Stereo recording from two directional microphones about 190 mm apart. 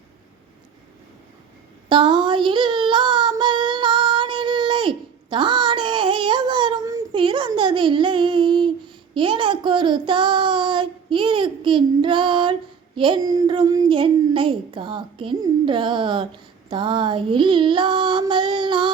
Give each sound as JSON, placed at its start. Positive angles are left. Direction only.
{"t": 1.9, "sound": "child singing", "side_deg": -25}
{"t": 13.0, "sound": "a child's voice", "side_deg": -20}